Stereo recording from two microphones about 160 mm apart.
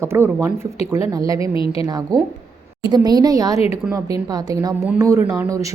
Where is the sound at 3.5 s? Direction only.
40° left (ahead or behind).